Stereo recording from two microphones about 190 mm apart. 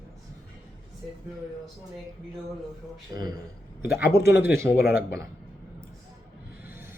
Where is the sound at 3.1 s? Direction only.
20° right (ahead or behind).